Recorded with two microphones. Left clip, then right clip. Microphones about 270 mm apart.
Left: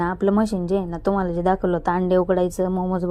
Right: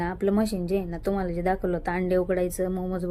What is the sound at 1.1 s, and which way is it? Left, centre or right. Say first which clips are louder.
Speech: left 7 dB; centre.